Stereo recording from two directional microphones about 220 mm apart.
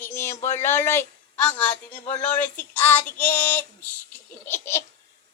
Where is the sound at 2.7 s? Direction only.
10° left (ahead or behind).